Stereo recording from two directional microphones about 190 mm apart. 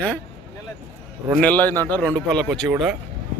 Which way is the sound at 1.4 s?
10° left (ahead or behind).